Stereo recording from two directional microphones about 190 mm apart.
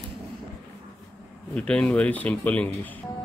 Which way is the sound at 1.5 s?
5° left (ahead or behind).